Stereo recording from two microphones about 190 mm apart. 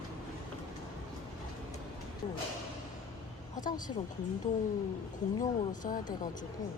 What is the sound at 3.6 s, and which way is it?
Speech, 45° left (ahead or behind).